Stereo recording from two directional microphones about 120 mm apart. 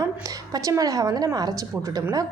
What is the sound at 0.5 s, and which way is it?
A woman's voice, 30° right (ahead or behind).